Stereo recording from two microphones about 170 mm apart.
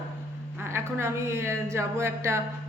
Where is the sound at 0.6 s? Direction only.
15° right (ahead or behind).